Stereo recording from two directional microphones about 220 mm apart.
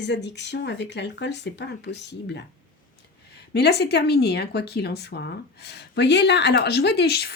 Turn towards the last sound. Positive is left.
turn(degrees=45)  # may be behind; listen again after turning